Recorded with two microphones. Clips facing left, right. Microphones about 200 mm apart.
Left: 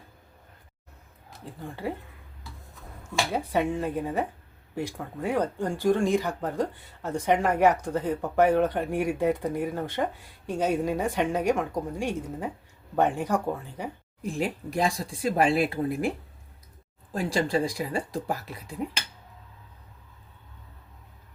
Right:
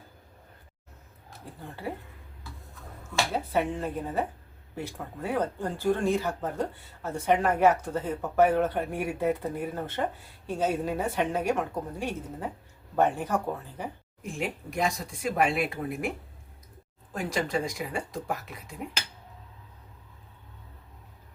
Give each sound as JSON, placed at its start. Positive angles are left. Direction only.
{"t": 3.3, "sound": "speech", "side_deg": 15}
{"t": 14.2, "sound": "speech", "side_deg": 35}